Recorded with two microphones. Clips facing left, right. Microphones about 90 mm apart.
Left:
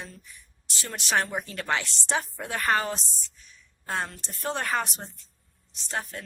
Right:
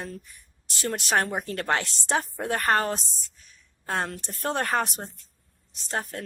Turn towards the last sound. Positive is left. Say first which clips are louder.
# right 2 dB
turn(degrees=-45)  # may be behind; listen again after turning